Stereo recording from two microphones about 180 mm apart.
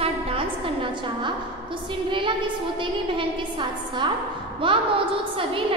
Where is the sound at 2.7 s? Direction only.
25° right (ahead or behind).